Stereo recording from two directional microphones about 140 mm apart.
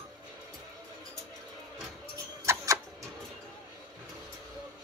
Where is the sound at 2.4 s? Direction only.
25° right (ahead or behind).